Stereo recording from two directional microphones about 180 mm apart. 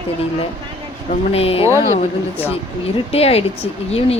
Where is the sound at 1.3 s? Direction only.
35° left (ahead or behind).